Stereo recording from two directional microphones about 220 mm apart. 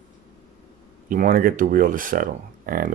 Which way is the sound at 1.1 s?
40° right (ahead or behind).